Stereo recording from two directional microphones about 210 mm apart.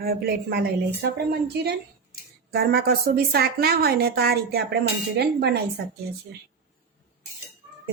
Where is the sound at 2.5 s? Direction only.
45° right (ahead or behind).